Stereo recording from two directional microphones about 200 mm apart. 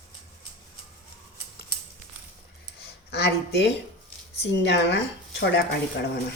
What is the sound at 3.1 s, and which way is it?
Speech, 55° left (ahead or behind).